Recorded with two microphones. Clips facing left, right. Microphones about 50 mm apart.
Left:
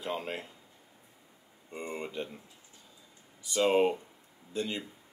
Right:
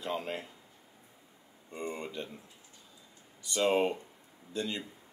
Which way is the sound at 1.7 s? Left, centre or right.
Centre.